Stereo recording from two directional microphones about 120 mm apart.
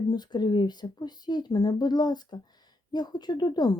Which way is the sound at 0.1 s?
35° left (ahead or behind).